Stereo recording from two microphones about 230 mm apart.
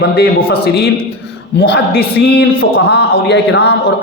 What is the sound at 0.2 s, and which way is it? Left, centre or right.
Speech, left.